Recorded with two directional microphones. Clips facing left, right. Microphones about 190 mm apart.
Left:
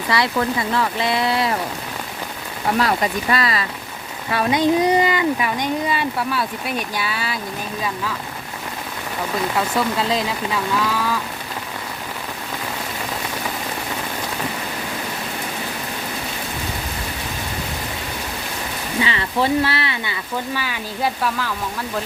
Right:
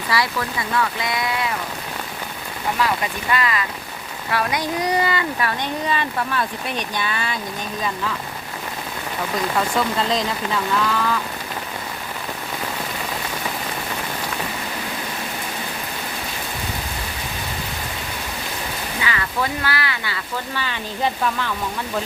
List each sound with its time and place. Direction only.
0.1 s speech: 25° left (ahead or behind)
3.3 s speech: 35° left (ahead or behind); by 8.1 s 5° left (ahead or behind)
9.6 s speech: 5° left (ahead or behind)
18.9 s speech: 25° left (ahead or behind)
20.5 s speech: 10° left (ahead or behind)